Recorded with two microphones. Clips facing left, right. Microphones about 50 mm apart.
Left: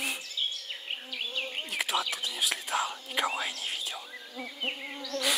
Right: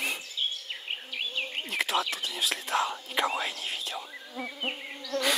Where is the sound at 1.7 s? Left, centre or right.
Centre.